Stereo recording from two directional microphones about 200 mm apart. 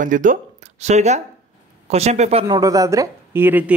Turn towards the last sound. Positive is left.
turn(degrees=-10)  # may be behind; listen again after turning